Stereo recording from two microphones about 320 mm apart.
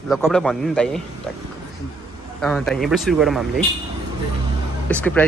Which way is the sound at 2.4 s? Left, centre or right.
Centre.